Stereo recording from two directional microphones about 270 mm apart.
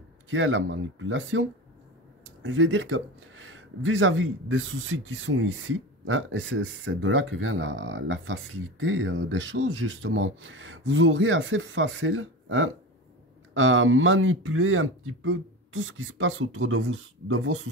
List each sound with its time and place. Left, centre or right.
0.3 s speech: right